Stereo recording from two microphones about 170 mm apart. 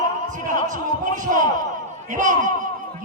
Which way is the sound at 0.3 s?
50° right (ahead or behind).